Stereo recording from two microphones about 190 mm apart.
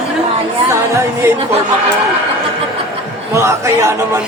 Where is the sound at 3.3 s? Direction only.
15° right (ahead or behind).